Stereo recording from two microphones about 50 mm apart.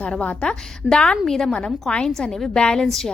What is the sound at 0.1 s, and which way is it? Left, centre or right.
A woman's voice, left.